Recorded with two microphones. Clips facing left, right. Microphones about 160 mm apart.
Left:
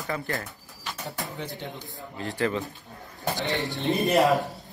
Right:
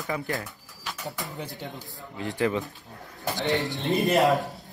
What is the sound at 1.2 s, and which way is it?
Speech, centre (ahead or behind).